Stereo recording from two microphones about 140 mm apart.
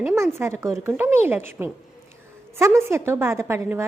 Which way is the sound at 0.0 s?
10° right (ahead or behind).